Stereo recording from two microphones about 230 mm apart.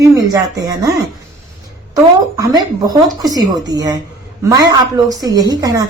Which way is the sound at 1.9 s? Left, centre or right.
Centre.